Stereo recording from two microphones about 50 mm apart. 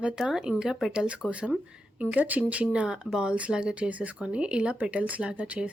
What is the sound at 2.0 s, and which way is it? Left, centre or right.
Speech, right.